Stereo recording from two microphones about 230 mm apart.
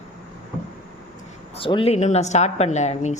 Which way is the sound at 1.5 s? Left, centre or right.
Left.